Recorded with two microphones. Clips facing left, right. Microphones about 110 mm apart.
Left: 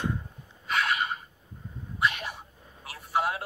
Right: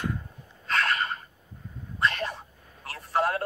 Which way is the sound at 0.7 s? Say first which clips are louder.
Right 1 dB; 10° left (ahead or behind).